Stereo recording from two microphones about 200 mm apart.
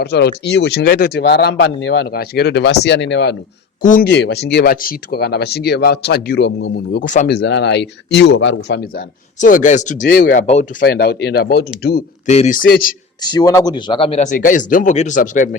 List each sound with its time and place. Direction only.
0.0 s speech: 55° left (ahead or behind)
3.8 s speech: 40° left (ahead or behind)
4.1 s speech: 55° left (ahead or behind)
7.0 s speech: 40° left (ahead or behind)
7.3 s speech: 60° left (ahead or behind)
9.4 s speech: 40° left (ahead or behind)
10.8 s speech: 50° left (ahead or behind)
12.2 s speech: 35° left (ahead or behind)
13.2 s speech: 20° left (ahead or behind); by 15.4 s 40° left (ahead or behind)